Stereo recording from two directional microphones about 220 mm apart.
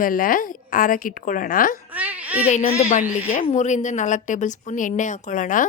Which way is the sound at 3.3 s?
35° left (ahead or behind).